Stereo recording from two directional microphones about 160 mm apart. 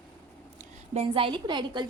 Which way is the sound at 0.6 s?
40° right (ahead or behind).